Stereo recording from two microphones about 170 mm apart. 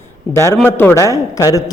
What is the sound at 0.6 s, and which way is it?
A man's voice, 15° left (ahead or behind).